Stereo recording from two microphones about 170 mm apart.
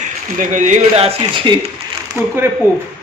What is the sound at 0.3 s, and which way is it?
A man's voice, 45° right (ahead or behind).